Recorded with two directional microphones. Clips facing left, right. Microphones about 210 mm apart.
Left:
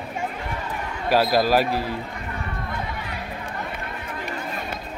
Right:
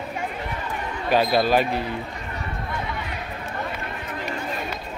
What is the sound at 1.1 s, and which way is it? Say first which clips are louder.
Speech: even; 5° left (ahead or behind).